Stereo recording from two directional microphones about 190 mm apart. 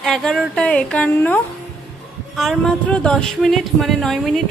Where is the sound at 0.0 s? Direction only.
Centre (ahead or behind).